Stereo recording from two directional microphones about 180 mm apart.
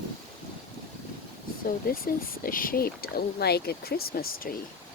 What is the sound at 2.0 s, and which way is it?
Speech, 50° left (ahead or behind).